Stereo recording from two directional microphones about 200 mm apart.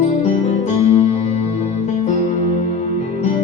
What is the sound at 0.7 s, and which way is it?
Music, 35° left (ahead or behind).